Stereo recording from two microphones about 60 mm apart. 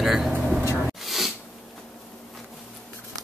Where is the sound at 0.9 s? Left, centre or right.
Centre.